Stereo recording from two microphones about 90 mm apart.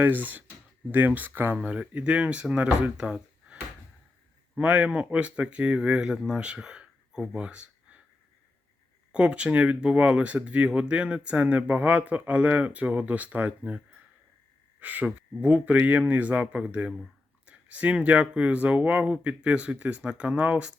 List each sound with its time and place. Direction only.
0.0 s speech: 20° right (ahead or behind)
1.5 s speech: 10° right (ahead or behind)
9.1 s speech: 15° right (ahead or behind)